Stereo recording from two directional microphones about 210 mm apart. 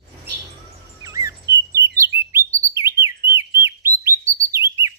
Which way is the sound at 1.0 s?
15° right (ahead or behind).